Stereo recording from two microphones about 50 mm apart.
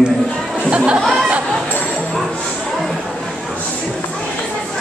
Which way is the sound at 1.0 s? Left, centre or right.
Centre.